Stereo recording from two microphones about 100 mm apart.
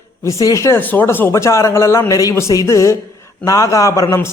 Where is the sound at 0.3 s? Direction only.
35° left (ahead or behind).